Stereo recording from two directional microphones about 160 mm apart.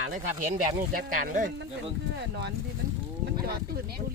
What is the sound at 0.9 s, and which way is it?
Speech, 55° right (ahead or behind).